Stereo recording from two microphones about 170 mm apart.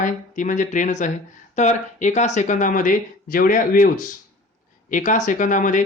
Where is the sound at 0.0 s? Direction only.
45° left (ahead or behind).